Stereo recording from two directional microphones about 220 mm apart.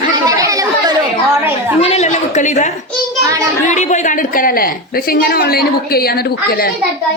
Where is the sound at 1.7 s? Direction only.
25° left (ahead or behind).